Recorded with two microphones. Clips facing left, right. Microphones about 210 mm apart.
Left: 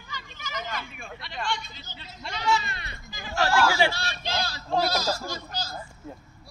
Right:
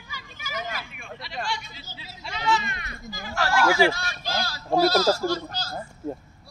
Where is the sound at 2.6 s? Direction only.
30° left (ahead or behind); by 5.7 s 15° left (ahead or behind).